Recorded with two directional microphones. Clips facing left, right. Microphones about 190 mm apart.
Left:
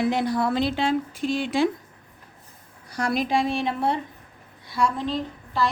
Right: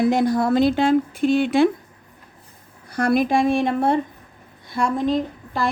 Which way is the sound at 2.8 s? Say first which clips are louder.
Right 6 dB; 55° right (ahead or behind).